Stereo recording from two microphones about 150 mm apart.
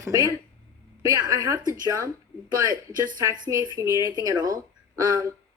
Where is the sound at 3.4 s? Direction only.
20° right (ahead or behind).